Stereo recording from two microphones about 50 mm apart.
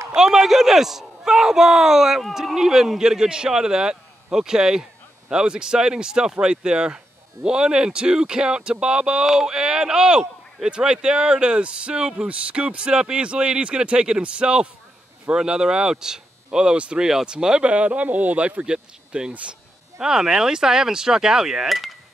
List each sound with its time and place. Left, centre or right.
0.1 s speech: centre